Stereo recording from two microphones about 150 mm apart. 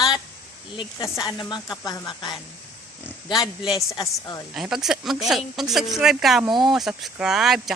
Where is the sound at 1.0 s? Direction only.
25° left (ahead or behind).